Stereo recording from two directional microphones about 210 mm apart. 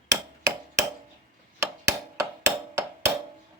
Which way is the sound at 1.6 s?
15° right (ahead or behind).